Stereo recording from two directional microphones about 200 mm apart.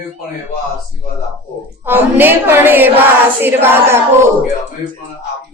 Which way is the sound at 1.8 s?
10° right (ahead or behind).